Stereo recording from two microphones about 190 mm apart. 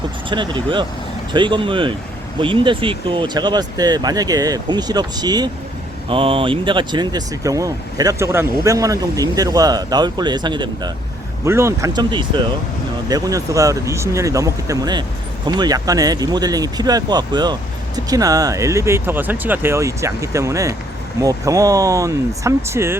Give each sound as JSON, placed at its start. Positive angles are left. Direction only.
{"t": 0.3, "sound": "speech", "side_deg": -25}